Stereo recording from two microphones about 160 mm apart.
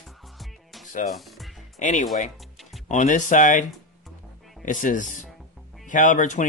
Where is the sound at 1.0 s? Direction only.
Centre (ahead or behind).